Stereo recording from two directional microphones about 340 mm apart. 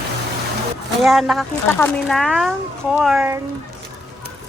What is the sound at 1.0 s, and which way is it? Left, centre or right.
Speech, centre.